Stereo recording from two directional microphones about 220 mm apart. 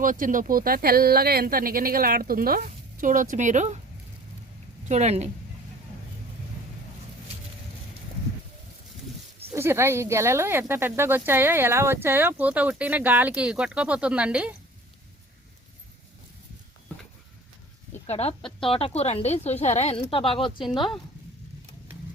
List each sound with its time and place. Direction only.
0.0 s speech: 35° right (ahead or behind)
4.9 s speech: 30° right (ahead or behind)
9.5 s speech: 10° right (ahead or behind)
18.0 s a woman's voice: 30° left (ahead or behind)